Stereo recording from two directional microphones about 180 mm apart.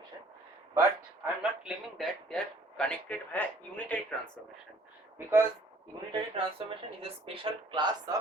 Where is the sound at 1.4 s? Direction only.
Centre (ahead or behind).